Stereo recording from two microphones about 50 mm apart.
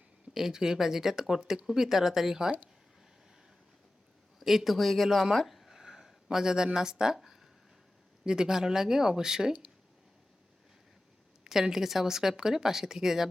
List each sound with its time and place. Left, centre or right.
0.3 s speech: centre
4.4 s speech: centre
8.2 s speech: centre
9.5 s speech: right
11.4 s speech: centre